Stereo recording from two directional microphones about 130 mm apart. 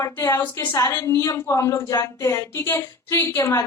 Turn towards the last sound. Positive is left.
turn(degrees=20)  # may be behind; listen again after turning